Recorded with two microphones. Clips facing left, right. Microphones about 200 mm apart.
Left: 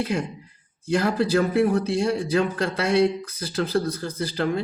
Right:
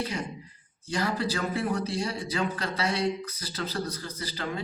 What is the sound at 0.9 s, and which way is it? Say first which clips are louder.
A man's voice: left 8 dB; 55° left (ahead or behind).